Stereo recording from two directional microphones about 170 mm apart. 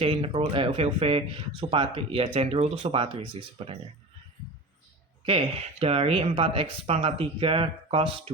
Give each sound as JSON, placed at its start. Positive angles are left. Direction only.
{"t": 0.0, "sound": "speech", "side_deg": -30}
{"t": 5.2, "sound": "speech", "side_deg": -30}